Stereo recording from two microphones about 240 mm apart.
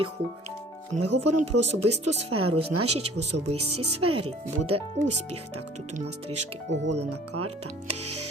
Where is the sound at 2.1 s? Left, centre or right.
Right.